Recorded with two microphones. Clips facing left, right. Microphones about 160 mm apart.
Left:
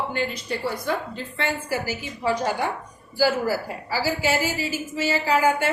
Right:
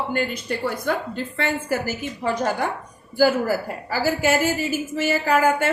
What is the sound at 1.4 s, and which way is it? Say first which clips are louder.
A woman's voice: right 2 dB; 50° right (ahead or behind).